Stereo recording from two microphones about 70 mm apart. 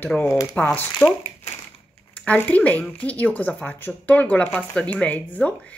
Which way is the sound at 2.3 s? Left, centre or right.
Left.